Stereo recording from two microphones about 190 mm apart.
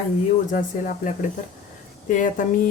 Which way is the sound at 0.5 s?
45° left (ahead or behind).